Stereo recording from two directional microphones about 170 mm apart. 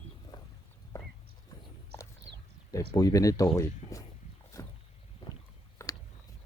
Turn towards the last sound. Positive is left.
turn(degrees=20)  # may be behind; listen again after turning